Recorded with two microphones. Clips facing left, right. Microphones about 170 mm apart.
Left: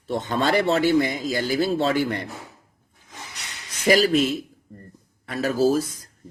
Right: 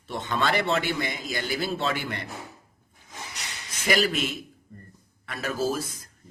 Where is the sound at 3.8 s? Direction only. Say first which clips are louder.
Left 7 dB; 35° left (ahead or behind).